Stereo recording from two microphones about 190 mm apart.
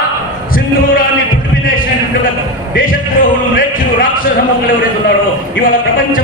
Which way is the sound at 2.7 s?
45° left (ahead or behind).